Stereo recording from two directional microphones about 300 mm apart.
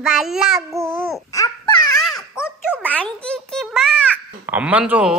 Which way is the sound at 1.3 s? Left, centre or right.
Centre.